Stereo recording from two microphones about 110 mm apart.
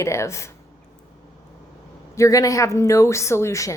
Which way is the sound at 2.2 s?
30° left (ahead or behind).